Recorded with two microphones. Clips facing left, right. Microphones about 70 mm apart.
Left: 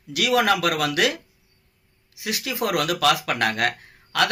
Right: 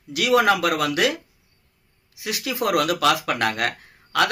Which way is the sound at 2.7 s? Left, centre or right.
Right.